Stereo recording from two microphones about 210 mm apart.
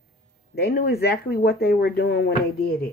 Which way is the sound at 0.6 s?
50° left (ahead or behind).